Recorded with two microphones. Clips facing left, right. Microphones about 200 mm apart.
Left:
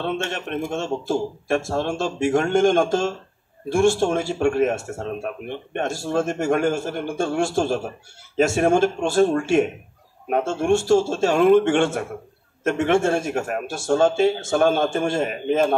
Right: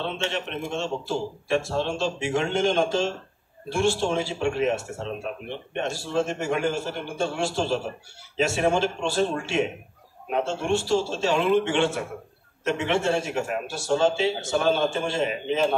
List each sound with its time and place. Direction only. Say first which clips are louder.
0.0 s speech: left 3 dB; 50° left (ahead or behind)